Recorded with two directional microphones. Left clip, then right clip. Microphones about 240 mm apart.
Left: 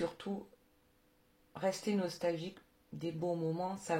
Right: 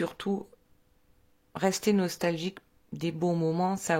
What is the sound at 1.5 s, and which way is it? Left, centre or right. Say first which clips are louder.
A woman's voice: right 8 dB; right.